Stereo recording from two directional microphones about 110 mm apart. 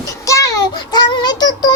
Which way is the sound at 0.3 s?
30° left (ahead or behind).